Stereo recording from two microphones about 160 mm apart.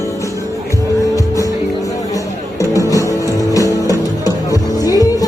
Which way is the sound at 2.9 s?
20° left (ahead or behind).